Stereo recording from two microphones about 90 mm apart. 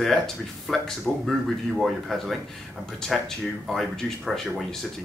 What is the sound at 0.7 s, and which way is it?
Speech, 5° left (ahead or behind).